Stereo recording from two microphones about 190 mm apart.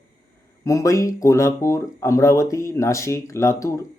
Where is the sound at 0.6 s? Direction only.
15° left (ahead or behind).